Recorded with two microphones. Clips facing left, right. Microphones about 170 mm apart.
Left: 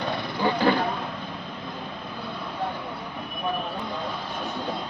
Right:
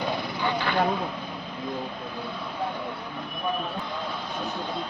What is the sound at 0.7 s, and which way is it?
Vehicle, 30° left (ahead or behind).